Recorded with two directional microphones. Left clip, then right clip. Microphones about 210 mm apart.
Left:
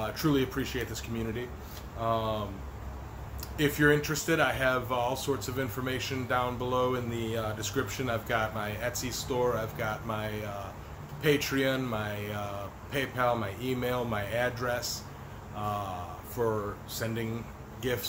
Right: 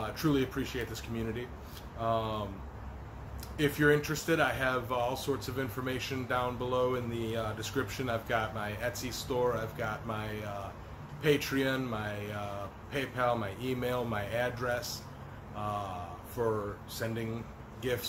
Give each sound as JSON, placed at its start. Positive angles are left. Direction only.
{"t": 0.0, "sound": "speech", "side_deg": 0}
{"t": 3.5, "sound": "speech", "side_deg": 0}
{"t": 16.3, "sound": "speech", "side_deg": 0}